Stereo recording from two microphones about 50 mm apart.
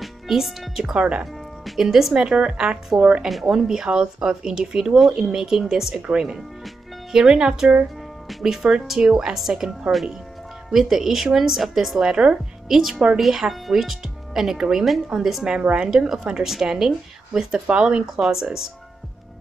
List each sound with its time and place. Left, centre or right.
0.0 s speech: centre
0.9 s speech: right
1.2 s speech: centre
3.3 s a woman's voice: centre